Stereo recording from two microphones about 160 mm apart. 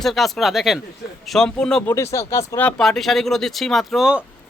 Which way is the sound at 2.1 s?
20° left (ahead or behind).